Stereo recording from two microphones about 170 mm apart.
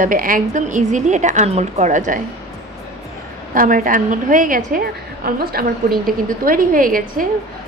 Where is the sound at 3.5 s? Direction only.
55° right (ahead or behind).